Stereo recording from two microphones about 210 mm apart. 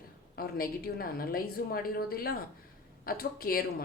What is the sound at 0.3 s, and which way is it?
A woman's voice, 45° left (ahead or behind).